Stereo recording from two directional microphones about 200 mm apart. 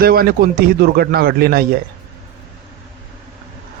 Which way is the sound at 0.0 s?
50° right (ahead or behind).